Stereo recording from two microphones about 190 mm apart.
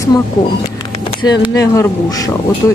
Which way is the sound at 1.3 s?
20° left (ahead or behind).